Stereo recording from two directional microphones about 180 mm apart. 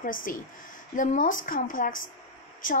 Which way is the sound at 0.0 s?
50° left (ahead or behind).